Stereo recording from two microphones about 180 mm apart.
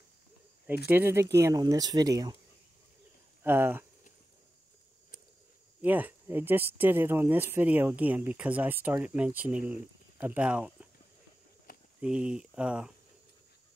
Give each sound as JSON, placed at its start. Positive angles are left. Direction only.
{"t": 0.8, "sound": "speech", "side_deg": -10}
{"t": 3.4, "sound": "speech", "side_deg": -10}
{"t": 5.8, "sound": "speech", "side_deg": -10}
{"t": 12.0, "sound": "speech", "side_deg": -5}